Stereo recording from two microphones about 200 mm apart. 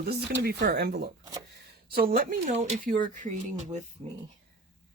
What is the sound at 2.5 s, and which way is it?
Speech, 35° right (ahead or behind).